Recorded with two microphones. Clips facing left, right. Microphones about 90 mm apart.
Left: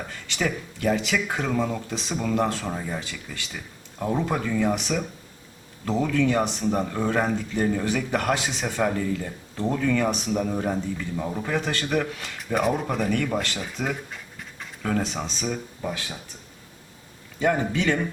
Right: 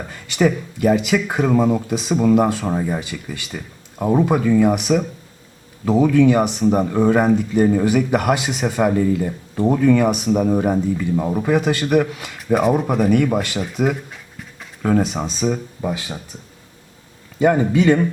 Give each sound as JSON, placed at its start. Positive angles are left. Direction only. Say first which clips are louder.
{"t": 0.3, "sound": "speech", "louder": "right 10 dB", "side_deg": -10}
{"t": 2.6, "sound": "speech", "louder": "right 9 dB", "side_deg": -30}
{"t": 3.0, "sound": "speech", "louder": "right 7 dB", "side_deg": -10}
{"t": 15.8, "sound": "speech", "louder": "right 6 dB", "side_deg": -10}
{"t": 17.4, "sound": "speech", "louder": "right 8 dB", "side_deg": -10}